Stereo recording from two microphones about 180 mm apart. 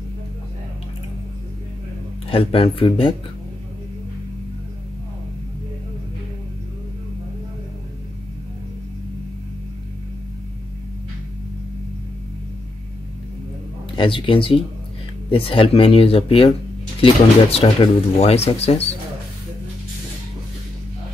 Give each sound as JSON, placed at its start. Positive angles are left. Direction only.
{"t": 2.2, "sound": "speech", "side_deg": 30}
{"t": 13.9, "sound": "speech", "side_deg": 30}